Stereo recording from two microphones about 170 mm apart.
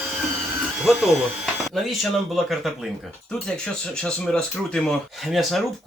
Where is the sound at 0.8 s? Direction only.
5° right (ahead or behind).